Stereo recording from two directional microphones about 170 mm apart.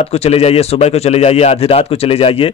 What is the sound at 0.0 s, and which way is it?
Speech, 35° left (ahead or behind).